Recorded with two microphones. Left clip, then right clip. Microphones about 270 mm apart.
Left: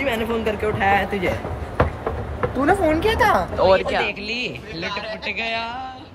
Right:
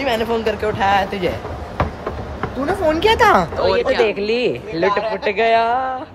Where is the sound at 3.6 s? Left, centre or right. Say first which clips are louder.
Right 2 dB; centre.